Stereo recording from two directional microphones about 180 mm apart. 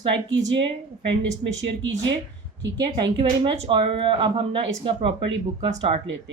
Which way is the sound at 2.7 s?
25° right (ahead or behind).